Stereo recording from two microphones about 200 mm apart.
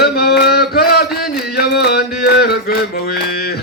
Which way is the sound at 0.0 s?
50° left (ahead or behind).